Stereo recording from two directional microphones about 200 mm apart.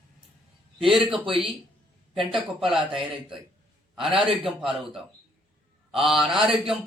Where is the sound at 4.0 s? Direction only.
25° right (ahead or behind).